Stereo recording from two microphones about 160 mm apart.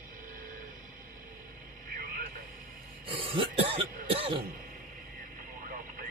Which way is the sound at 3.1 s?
35° right (ahead or behind).